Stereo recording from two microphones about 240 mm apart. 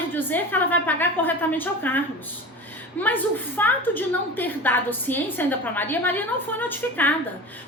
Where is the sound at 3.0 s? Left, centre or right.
Centre.